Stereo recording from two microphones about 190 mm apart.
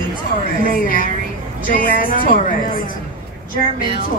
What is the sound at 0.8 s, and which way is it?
Speech, 45° left (ahead or behind).